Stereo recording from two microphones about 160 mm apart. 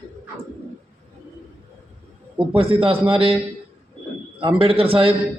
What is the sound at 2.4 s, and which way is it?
Speech, 35° right (ahead or behind).